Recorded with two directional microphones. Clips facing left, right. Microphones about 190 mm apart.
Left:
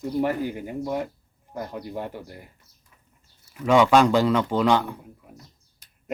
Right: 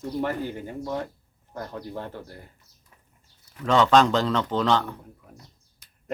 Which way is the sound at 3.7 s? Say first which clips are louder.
Left 2 dB; 10° left (ahead or behind).